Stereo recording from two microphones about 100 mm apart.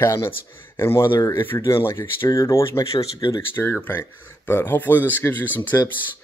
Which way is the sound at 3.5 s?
20° left (ahead or behind).